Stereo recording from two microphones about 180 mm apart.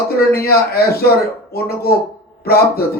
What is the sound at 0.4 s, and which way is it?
A man's voice, 60° left (ahead or behind).